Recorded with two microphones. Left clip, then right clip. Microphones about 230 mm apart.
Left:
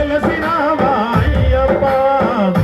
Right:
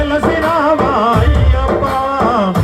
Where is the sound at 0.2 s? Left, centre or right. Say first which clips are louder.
Right 3 dB; right.